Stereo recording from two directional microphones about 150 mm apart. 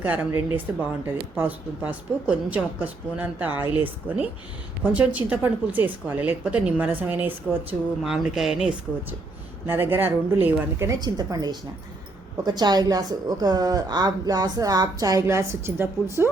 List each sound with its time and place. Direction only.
0.0 s speech: 10° right (ahead or behind)
8.0 s speech: centre (ahead or behind)
9.6 s a woman's voice: 15° right (ahead or behind)